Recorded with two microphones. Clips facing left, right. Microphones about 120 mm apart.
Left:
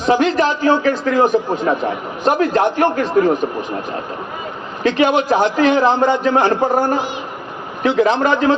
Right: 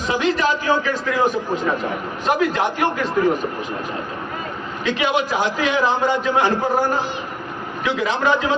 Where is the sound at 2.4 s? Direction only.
50° left (ahead or behind).